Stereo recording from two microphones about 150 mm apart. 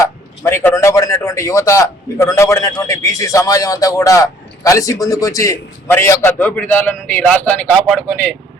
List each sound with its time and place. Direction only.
0.4 s a man's voice: 15° left (ahead or behind)